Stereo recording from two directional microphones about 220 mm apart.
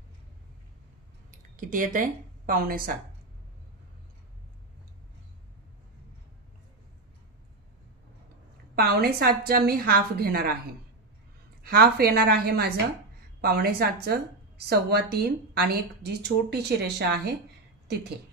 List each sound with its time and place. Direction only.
1.6 s speech: 35° right (ahead or behind)
8.7 s a woman's voice: 45° right (ahead or behind)
11.6 s a woman's voice: 45° right (ahead or behind)